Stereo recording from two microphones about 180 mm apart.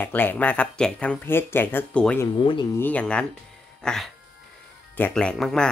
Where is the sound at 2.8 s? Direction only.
10° left (ahead or behind).